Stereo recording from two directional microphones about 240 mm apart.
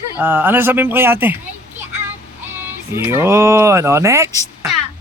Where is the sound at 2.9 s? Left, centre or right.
Centre.